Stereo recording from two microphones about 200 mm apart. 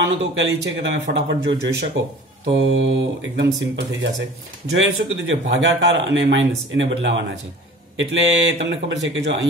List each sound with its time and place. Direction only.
0.3 s speech: 65° right (ahead or behind)
2.0 s speech: 80° right
2.5 s speech: 65° right (ahead or behind)